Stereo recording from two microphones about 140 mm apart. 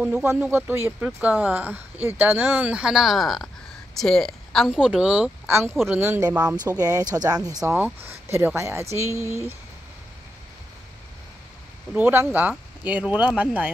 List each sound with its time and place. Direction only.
0.0 s speech: 15° right (ahead or behind)
5.5 s speech: 20° right (ahead or behind)
7.7 s speech: 15° right (ahead or behind)
9.2 s speech: 20° left (ahead or behind)
11.9 s speech: 15° right (ahead or behind)